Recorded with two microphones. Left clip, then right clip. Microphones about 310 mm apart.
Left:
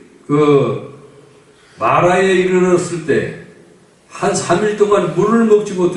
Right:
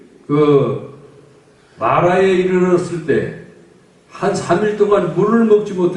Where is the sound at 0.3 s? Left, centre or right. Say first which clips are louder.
Left 1 dB; centre.